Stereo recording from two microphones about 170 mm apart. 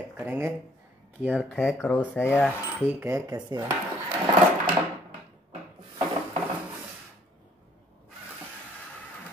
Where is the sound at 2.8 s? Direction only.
15° right (ahead or behind).